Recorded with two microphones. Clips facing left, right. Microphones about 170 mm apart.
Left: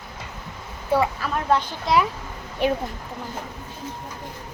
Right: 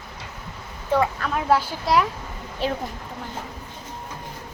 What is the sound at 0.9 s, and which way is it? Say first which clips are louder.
Speech: even; 5° left (ahead or behind).